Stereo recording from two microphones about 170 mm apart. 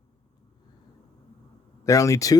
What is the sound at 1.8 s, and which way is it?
Speech, 20° left (ahead or behind).